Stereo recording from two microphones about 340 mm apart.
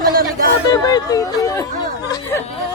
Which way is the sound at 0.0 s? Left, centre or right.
Right.